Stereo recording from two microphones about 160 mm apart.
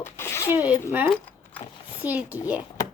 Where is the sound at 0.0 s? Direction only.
15° left (ahead or behind).